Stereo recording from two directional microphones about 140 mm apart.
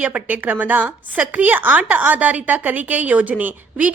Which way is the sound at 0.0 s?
10° right (ahead or behind).